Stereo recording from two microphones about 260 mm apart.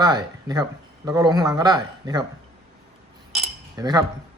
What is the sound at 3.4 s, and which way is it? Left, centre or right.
Cutlery, centre.